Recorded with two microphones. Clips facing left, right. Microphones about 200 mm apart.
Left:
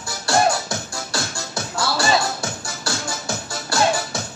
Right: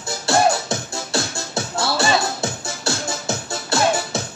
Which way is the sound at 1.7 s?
25° right (ahead or behind).